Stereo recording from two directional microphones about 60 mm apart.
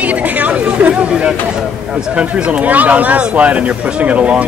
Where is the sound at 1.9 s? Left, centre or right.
Centre.